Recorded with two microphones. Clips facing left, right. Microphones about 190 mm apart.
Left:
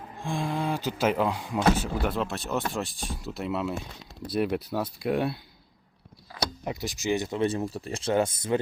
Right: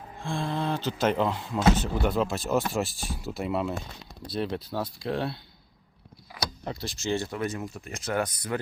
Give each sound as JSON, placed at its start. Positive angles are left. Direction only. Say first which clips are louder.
{"t": 0.2, "sound": "speech", "louder": "left 1 dB", "side_deg": 15}
{"t": 4.4, "sound": "speech", "louder": "left 3 dB", "side_deg": 10}
{"t": 6.7, "sound": "speech", "louder": "left 2 dB", "side_deg": 15}